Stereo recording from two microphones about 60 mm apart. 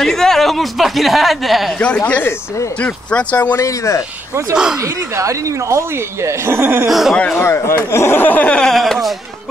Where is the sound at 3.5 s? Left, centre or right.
Left.